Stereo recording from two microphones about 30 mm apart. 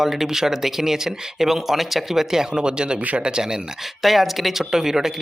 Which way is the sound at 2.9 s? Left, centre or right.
Right.